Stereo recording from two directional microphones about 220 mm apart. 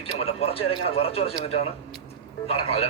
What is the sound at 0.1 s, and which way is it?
A man's voice, 30° left (ahead or behind).